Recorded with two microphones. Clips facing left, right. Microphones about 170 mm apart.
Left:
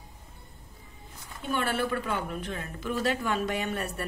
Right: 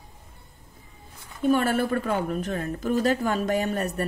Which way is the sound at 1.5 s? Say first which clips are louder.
Right 6 dB; 45° right (ahead or behind).